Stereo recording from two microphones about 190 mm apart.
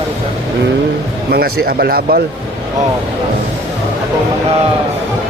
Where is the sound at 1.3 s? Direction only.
55° right (ahead or behind).